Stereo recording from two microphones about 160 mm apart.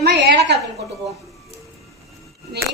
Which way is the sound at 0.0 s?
85° right.